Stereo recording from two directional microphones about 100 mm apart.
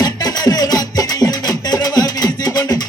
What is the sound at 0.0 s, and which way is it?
Music, 40° left (ahead or behind).